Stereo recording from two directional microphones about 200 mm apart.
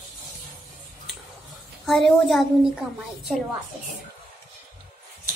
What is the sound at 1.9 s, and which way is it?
Speech, centre (ahead or behind).